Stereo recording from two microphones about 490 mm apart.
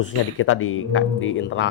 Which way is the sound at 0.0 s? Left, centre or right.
Left.